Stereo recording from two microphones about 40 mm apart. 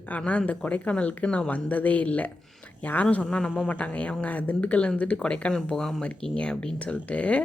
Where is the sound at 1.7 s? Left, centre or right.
Left.